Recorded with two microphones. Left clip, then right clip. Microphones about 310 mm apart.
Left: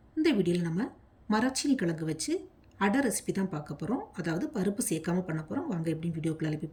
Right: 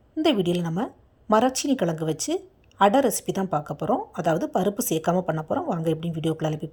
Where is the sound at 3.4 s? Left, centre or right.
Right.